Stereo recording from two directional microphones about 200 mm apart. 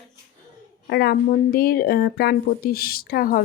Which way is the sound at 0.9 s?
55° left (ahead or behind).